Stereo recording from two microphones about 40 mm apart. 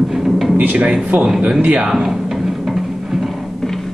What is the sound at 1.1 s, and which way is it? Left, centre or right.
Speech, right.